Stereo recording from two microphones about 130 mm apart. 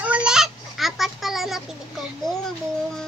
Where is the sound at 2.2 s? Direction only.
5° left (ahead or behind).